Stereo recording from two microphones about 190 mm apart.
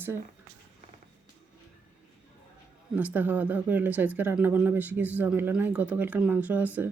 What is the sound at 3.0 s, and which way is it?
Speech, 10° right (ahead or behind).